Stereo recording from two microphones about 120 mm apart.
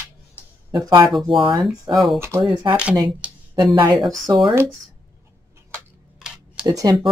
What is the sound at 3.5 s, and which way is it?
Speech, 35° right (ahead or behind).